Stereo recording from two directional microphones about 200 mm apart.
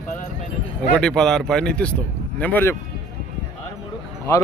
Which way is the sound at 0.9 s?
5° left (ahead or behind).